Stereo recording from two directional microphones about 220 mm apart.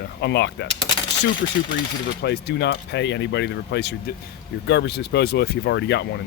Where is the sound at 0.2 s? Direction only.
50° left (ahead or behind).